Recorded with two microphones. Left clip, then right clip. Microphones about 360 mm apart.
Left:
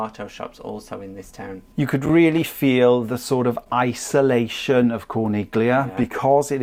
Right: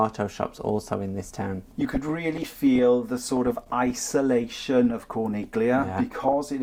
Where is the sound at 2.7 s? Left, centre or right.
Left.